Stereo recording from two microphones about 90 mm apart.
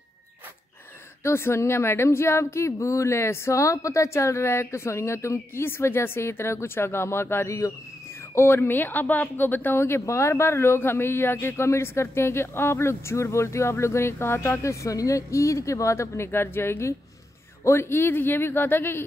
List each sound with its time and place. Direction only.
1.2 s a woman's voice: 30° left (ahead or behind)